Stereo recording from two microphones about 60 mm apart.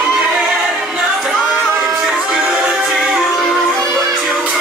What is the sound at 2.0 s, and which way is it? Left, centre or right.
Music, centre.